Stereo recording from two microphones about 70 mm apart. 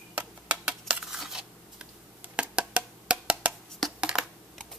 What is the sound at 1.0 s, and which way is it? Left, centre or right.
Scissors, centre.